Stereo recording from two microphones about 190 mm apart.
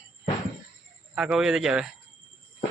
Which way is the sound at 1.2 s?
5° right (ahead or behind).